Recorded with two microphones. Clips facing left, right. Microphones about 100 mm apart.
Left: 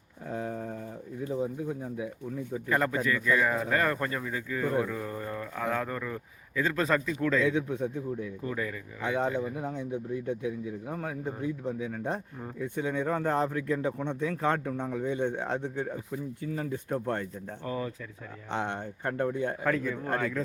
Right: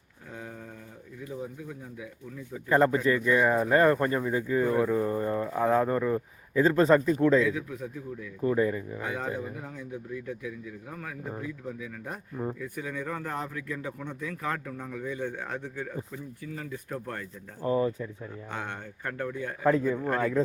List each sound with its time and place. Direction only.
1.2 s speech: 30° left (ahead or behind)
2.6 s speech: 30° right (ahead or behind)
7.4 s speech: 30° left (ahead or behind)
8.4 s speech: 25° right (ahead or behind)
9.0 s speech: 25° left (ahead or behind)
16.5 s speech: 35° left (ahead or behind)
17.6 s speech: 25° right (ahead or behind)
18.5 s speech: 25° left (ahead or behind)
19.6 s speech: 20° right (ahead or behind)